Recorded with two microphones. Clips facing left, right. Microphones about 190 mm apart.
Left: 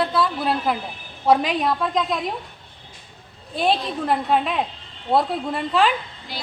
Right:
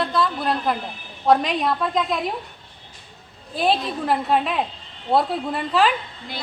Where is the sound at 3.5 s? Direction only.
Centre (ahead or behind).